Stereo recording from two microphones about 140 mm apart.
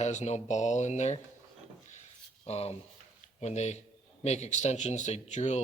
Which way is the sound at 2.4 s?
45° left (ahead or behind).